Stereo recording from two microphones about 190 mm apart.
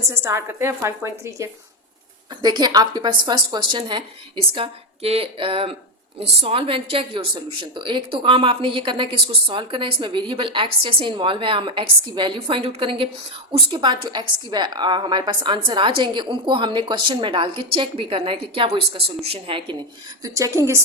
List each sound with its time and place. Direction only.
0.1 s a woman's voice: 15° right (ahead or behind)